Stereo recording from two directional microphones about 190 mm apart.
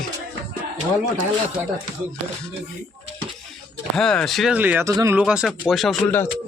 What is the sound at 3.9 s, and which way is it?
Speech, 5° left (ahead or behind).